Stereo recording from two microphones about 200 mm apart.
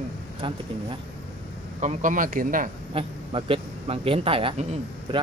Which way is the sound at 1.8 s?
40° right (ahead or behind).